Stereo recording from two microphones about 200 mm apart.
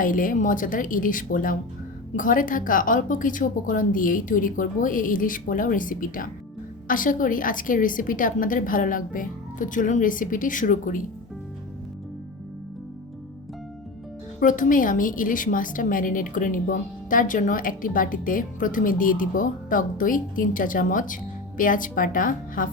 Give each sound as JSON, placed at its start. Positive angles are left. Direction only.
{"t": 0.0, "sound": "a woman's voice", "side_deg": 40}
{"t": 14.3, "sound": "a woman's voice", "side_deg": 40}